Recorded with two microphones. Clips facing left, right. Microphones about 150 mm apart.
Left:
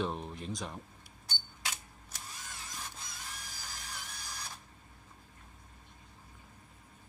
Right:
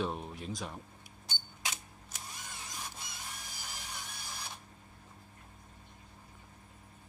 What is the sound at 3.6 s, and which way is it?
Printer, 10° right (ahead or behind).